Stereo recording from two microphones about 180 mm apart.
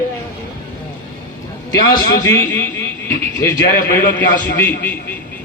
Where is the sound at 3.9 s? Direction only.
10° left (ahead or behind).